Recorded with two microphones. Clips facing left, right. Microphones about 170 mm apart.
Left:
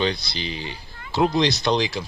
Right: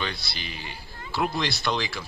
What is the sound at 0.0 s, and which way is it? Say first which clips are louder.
Speech: left 9 dB; 20° left (ahead or behind).